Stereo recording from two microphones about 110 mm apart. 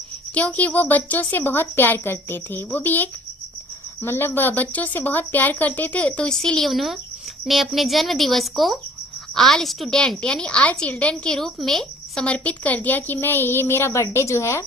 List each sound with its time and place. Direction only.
0.3 s a woman's voice: 15° left (ahead or behind)